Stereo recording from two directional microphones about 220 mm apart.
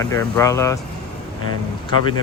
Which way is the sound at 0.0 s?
15° left (ahead or behind).